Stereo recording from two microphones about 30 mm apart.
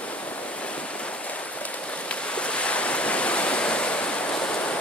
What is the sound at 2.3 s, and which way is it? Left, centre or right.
Waves, left.